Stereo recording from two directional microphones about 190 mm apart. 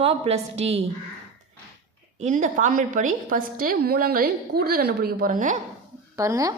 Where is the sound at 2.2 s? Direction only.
40° right (ahead or behind).